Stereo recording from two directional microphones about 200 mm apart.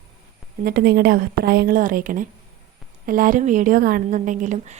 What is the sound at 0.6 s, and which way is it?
A woman's voice, 50° right (ahead or behind).